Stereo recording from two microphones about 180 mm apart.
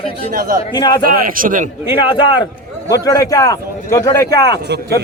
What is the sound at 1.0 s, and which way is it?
Speech, 55° right (ahead or behind).